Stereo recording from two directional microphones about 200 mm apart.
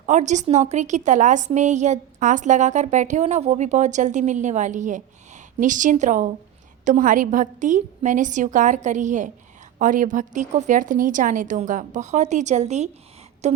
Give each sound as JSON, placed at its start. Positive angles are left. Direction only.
{"t": 0.0, "sound": "a woman's voice", "side_deg": -35}